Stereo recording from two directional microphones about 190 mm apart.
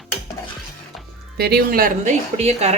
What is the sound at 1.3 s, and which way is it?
Speech, 55° right (ahead or behind).